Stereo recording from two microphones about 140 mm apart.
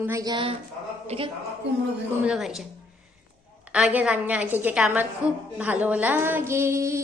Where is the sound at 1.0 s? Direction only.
40° right (ahead or behind).